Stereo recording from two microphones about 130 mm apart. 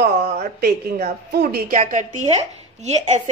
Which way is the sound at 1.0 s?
90° right.